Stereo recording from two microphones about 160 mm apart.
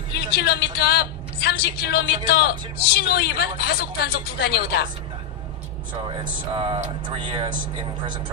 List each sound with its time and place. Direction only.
0.1 s a woman's voice: 85° left
6.5 s speech: 30° right (ahead or behind)